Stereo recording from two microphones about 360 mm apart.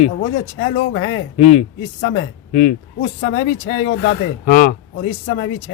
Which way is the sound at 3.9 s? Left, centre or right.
Left.